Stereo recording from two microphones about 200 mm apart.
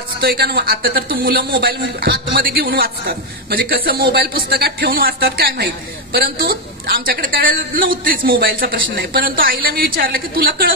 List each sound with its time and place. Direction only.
0.2 s a man's voice: 50° right (ahead or behind)